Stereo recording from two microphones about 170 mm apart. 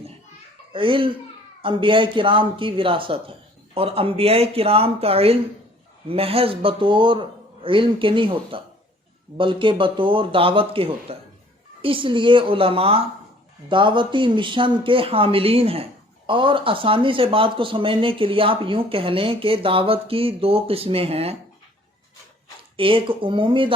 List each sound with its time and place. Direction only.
0.7 s speech: 30° right (ahead or behind)
22.8 s speech: 30° right (ahead or behind)